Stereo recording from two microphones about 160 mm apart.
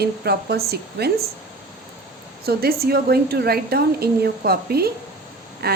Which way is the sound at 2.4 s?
75° right (ahead or behind).